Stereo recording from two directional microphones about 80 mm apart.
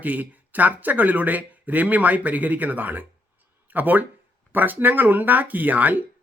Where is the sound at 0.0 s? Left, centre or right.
Right.